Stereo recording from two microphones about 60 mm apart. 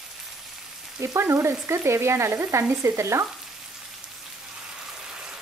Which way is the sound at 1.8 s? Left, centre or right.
Right.